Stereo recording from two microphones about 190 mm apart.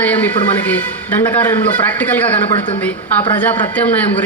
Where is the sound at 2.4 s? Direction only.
30° left (ahead or behind).